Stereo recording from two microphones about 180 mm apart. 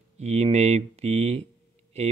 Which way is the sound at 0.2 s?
35° right (ahead or behind).